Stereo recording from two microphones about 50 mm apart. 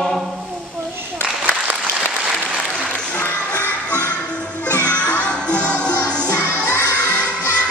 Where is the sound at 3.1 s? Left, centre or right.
Left.